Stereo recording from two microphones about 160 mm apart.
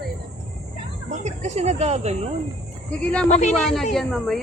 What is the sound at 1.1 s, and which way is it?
Speech, 50° right (ahead or behind).